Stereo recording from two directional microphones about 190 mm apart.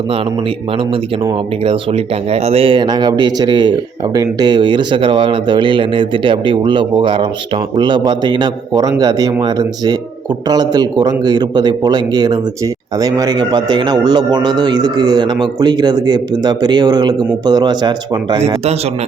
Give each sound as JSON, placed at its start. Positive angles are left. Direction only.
{"t": 1.6, "sound": "speech", "side_deg": -30}